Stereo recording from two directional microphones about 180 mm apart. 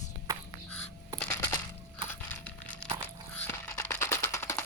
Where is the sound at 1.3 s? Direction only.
20° left (ahead or behind).